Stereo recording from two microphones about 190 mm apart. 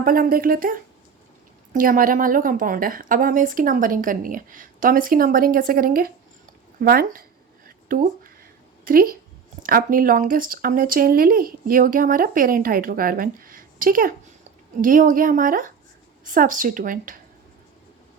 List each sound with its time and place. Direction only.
0.0 s speech: 50° right (ahead or behind)